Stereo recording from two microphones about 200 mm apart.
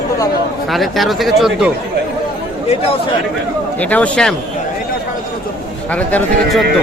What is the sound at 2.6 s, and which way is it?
Speech, 30° left (ahead or behind).